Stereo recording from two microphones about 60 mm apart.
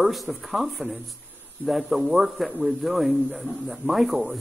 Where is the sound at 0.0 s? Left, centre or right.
Centre.